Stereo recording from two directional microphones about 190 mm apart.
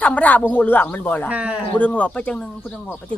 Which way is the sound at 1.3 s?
5° right (ahead or behind).